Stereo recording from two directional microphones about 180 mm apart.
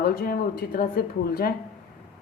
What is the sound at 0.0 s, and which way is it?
A woman's voice, 55° left (ahead or behind).